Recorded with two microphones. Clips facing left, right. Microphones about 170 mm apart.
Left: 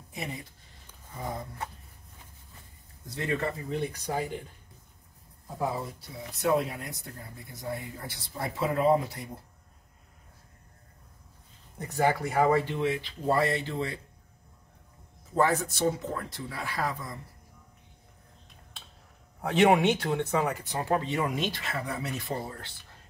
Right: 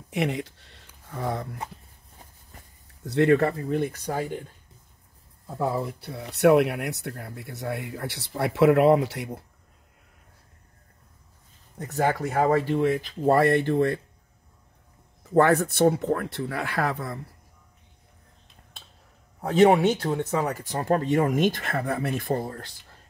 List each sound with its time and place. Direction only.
0.1 s speech: 80° right
3.1 s speech: 65° right (ahead or behind); by 4.4 s 50° right (ahead or behind)
5.8 s speech: 65° right (ahead or behind); by 9.3 s 80° right
11.9 s speech: 45° right (ahead or behind)
15.3 s speech: 65° right (ahead or behind)
19.4 s speech: 40° right (ahead or behind)